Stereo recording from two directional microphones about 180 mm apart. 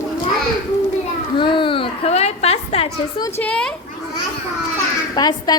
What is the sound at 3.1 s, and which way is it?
Speech, 20° left (ahead or behind).